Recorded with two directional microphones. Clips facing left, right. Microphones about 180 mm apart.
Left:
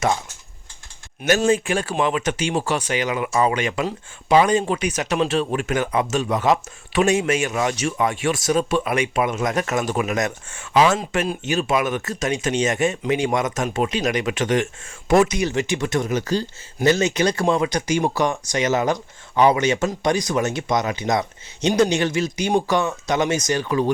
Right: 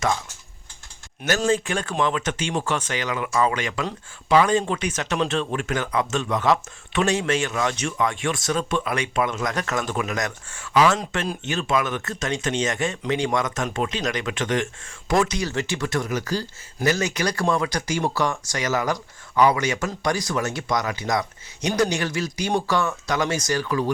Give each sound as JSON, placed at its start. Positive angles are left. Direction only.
{"t": 1.2, "sound": "speech", "side_deg": 20}